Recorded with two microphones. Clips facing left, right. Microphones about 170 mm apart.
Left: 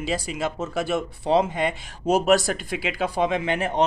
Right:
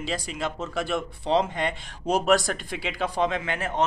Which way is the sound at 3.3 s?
20° left (ahead or behind).